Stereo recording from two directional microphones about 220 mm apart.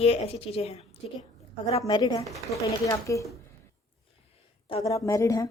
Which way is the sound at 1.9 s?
20° left (ahead or behind).